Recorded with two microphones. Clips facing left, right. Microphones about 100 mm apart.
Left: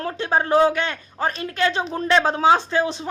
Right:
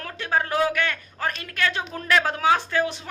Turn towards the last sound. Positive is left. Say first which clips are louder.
# left 3 dB
turn(degrees=25)  # may be behind; listen again after turning